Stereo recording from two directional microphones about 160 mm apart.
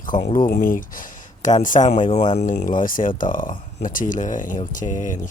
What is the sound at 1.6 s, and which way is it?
Speech, 55° left (ahead or behind).